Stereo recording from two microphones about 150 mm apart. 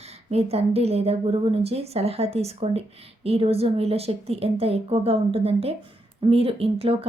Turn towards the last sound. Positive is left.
turn(degrees=-40)  # may be behind; listen again after turning